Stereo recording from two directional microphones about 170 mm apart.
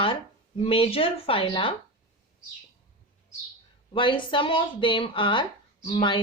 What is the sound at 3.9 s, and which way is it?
A woman's voice, 30° left (ahead or behind).